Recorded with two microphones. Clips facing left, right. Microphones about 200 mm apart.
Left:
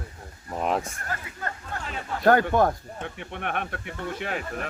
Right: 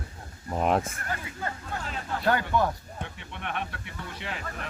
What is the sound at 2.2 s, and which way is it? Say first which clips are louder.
Speech: left 6 dB; 45° left (ahead or behind).